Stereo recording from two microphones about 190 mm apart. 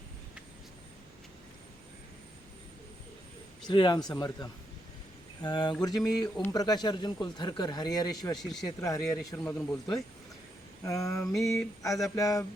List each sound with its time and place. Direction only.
3.7 s speech: 25° left (ahead or behind)
6.2 s speech: 10° left (ahead or behind)
6.5 s speech: 20° left (ahead or behind)
8.4 s speech: centre (ahead or behind)
8.8 s speech: 15° left (ahead or behind)